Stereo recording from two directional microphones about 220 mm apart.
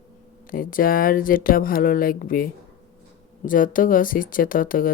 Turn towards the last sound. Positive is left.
turn(degrees=40)  # may be behind; listen again after turning